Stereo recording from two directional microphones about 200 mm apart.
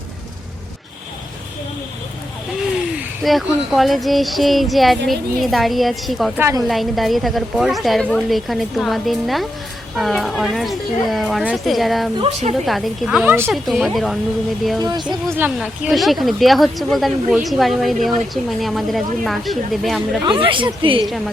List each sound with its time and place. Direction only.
2.9 s speech: 5° right (ahead or behind)
12.2 s speech: 35° right (ahead or behind)
12.6 s speech: centre (ahead or behind)
13.5 s speech: centre (ahead or behind)
14.8 s a woman's voice: 20° right (ahead or behind)
15.0 s speech: 10° right (ahead or behind)
20.2 s a woman's voice: 25° right (ahead or behind)